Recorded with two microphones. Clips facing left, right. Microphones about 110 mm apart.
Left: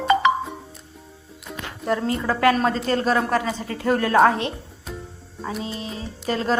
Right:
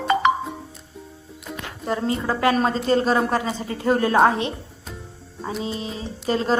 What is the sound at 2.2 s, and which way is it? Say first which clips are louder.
Speech: left 1 dB; 20° right (ahead or behind).